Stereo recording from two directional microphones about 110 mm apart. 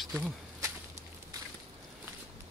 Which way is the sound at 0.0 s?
Centre (ahead or behind).